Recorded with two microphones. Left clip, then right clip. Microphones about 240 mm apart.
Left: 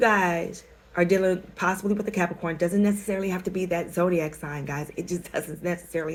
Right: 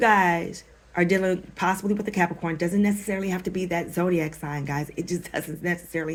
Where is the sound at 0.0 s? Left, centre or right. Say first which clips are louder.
Right 2 dB; right.